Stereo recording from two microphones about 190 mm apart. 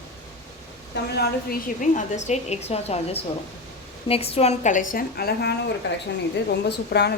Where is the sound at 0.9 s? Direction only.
65° left (ahead or behind).